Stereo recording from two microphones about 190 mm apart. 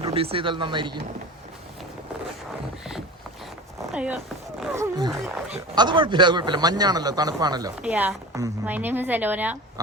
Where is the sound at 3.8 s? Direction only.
5° right (ahead or behind).